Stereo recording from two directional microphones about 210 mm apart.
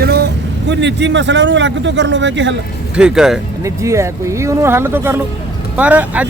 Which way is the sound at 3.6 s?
15° right (ahead or behind).